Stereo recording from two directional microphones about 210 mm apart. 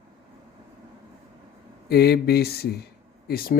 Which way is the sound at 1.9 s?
50° left (ahead or behind).